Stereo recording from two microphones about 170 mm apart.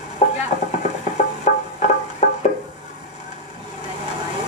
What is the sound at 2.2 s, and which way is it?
Music, 40° left (ahead or behind).